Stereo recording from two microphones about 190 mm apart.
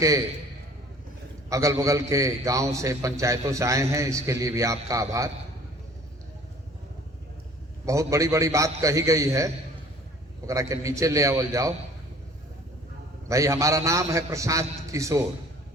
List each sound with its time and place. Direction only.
1.5 s a man's voice: 15° right (ahead or behind)
7.9 s a man's voice: 15° right (ahead or behind)
13.2 s a man's voice: 15° right (ahead or behind)